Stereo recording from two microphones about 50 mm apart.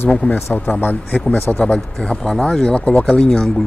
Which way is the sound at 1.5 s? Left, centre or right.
Left.